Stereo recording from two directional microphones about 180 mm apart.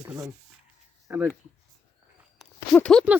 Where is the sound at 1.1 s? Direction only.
15° right (ahead or behind).